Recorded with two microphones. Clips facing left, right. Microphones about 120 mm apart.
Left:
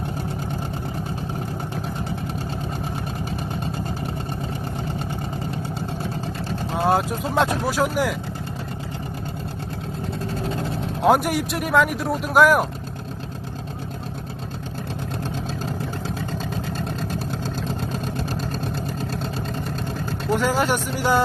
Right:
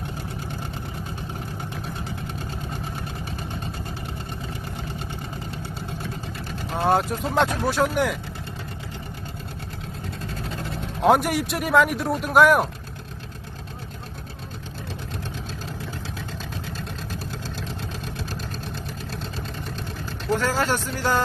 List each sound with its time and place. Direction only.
6.8 s speech: centre (ahead or behind)
11.0 s speech: centre (ahead or behind)
20.3 s speech: 15° left (ahead or behind)